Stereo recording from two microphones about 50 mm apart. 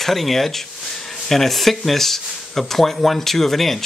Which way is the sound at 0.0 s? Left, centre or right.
Centre.